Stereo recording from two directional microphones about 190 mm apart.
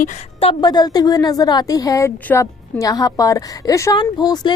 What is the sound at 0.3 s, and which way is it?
A woman's voice, 25° left (ahead or behind).